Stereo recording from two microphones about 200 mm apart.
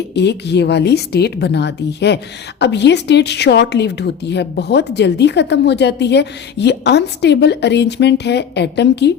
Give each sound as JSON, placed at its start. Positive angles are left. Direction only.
{"t": 0.1, "sound": "speech", "side_deg": 60}